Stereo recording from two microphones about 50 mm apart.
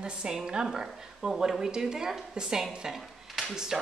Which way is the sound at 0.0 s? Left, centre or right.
Centre.